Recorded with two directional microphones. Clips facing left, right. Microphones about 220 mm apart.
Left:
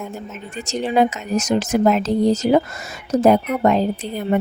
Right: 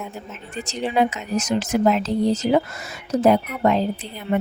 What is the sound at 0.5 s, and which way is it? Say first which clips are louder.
A woman's voice: left 3 dB; 45° left (ahead or behind).